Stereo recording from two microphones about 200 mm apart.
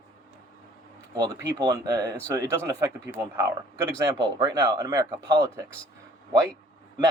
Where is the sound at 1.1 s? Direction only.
20° right (ahead or behind).